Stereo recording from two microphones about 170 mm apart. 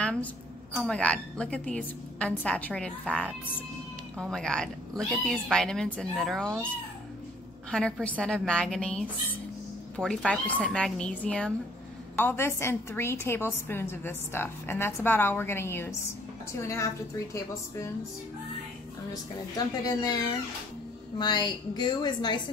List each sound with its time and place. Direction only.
0.0 s a woman's voice: 5° left (ahead or behind)
7.7 s a woman's voice: 5° left (ahead or behind)
19.5 s a woman's voice: 20° left (ahead or behind)
21.2 s a woman's voice: 25° left (ahead or behind)